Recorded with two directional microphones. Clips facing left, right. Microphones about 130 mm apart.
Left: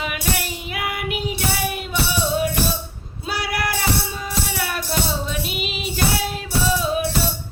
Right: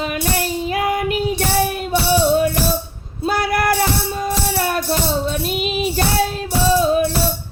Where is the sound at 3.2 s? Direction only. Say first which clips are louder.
Right 7 dB; 50° right (ahead or behind).